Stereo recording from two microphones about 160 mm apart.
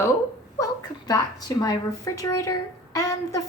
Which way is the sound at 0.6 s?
25° left (ahead or behind).